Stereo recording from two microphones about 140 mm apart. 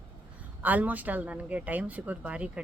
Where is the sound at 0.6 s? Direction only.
10° right (ahead or behind).